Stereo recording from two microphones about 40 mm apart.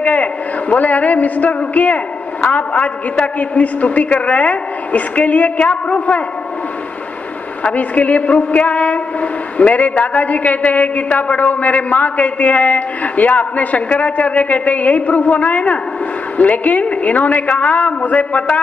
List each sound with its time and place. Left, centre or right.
0.0 s train: left
7.6 s train: left